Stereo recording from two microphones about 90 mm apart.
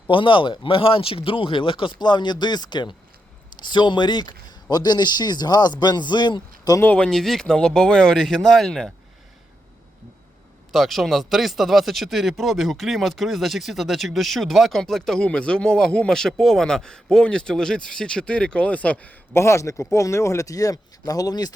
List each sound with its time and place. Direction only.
0.1 s speech: 70° left (ahead or behind); by 6.7 s 55° left (ahead or behind)
6.9 s speech: 10° left (ahead or behind)
7.2 s speech: centre (ahead or behind)
10.7 s speech: centre (ahead or behind)
19.3 s speech: 30° left (ahead or behind); by 21.5 s 45° left (ahead or behind)